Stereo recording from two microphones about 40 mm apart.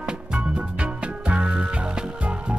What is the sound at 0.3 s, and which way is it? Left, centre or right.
Music, right.